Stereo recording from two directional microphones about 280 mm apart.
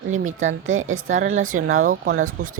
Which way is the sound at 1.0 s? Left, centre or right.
Right.